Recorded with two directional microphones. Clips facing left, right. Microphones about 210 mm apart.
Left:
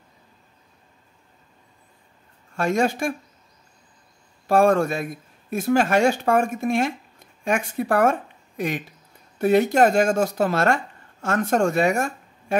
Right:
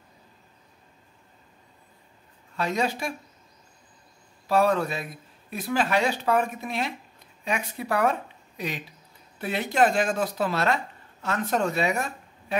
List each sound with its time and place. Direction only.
2.5 s speech: 50° left (ahead or behind)
4.5 s speech: 50° left (ahead or behind)